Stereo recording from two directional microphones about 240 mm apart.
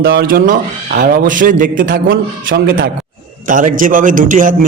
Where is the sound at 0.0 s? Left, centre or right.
Right.